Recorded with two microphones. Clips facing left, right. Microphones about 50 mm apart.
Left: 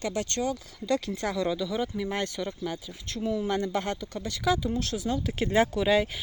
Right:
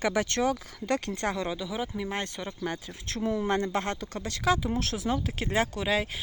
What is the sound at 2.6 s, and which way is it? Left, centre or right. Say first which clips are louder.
Speech: even; right.